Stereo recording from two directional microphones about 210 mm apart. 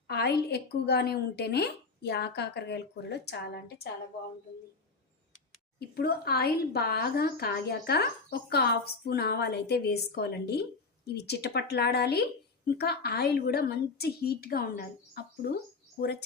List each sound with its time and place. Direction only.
0.1 s a woman's voice: 50° left (ahead or behind)
5.9 s a woman's voice: 50° left (ahead or behind)